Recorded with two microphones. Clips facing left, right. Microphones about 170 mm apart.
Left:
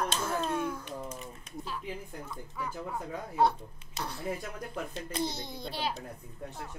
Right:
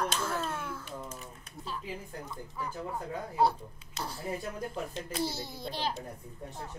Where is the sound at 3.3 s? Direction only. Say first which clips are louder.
Left 1 dB; centre (ahead or behind).